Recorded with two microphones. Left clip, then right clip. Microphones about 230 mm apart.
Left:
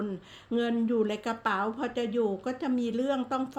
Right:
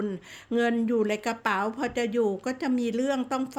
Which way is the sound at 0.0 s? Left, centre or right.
Right.